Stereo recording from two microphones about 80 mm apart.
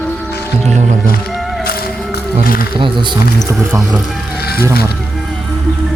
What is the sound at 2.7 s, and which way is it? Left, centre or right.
Speech, right.